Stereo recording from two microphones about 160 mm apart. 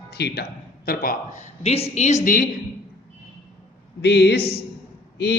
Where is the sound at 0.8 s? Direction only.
70° left (ahead or behind); by 2.3 s 45° left (ahead or behind).